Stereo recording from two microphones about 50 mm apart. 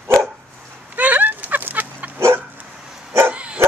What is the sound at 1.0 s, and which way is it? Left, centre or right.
Dog, right.